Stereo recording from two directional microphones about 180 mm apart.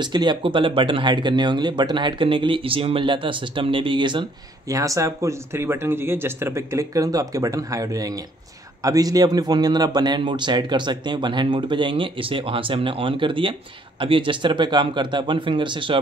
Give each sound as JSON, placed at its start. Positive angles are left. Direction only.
{"t": 0.0, "sound": "speech", "side_deg": -25}